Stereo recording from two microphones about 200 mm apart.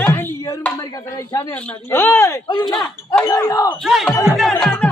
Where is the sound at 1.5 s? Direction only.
5° left (ahead or behind).